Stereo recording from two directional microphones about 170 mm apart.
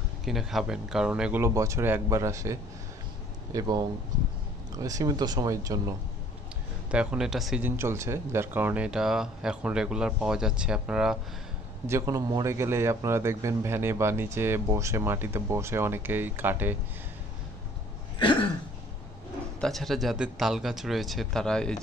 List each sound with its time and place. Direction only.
0.2 s speech: centre (ahead or behind)
1.4 s a man's voice: 15° right (ahead or behind)
6.9 s speech: 5° right (ahead or behind)
7.6 s speech: 15° right (ahead or behind)
11.9 s a man's voice: 20° right (ahead or behind)
18.2 s a sound: 30° left (ahead or behind)
19.6 s speech: centre (ahead or behind)